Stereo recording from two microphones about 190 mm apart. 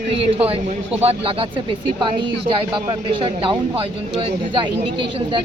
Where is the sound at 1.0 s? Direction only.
30° right (ahead or behind).